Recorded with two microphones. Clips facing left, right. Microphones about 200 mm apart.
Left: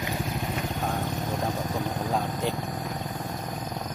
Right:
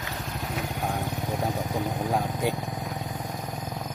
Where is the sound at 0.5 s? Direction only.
15° right (ahead or behind).